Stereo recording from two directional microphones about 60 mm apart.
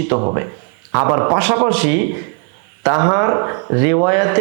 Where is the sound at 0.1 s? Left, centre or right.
Right.